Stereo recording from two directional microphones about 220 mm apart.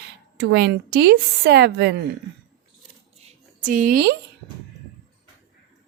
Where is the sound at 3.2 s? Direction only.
35° right (ahead or behind).